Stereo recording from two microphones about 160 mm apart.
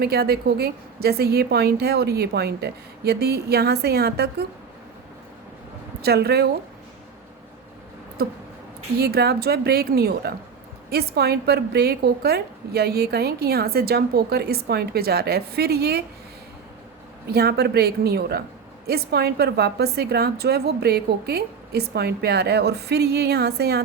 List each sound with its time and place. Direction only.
0.0 s a woman's voice: 80° right
6.0 s a woman's voice: 80° right
8.2 s a woman's voice: 80° right
17.3 s a woman's voice: 80° right